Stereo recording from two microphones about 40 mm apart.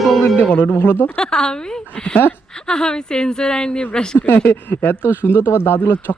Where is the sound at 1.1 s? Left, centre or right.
Centre.